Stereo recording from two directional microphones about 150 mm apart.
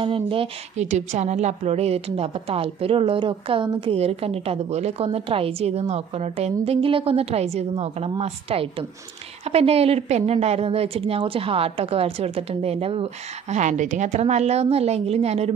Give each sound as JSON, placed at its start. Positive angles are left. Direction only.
{"t": 0.0, "sound": "a woman's voice", "side_deg": -35}